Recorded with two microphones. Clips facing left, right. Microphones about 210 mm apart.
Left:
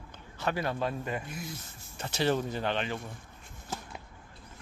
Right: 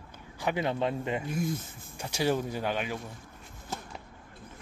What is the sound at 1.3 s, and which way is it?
Speech, 50° right (ahead or behind).